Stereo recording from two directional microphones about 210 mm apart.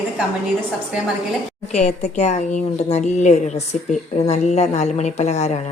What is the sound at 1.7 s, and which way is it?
A woman's voice, 30° left (ahead or behind).